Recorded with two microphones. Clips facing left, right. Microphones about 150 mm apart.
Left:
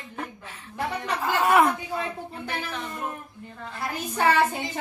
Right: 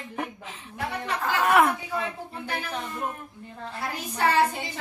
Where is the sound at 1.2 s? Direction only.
Centre (ahead or behind).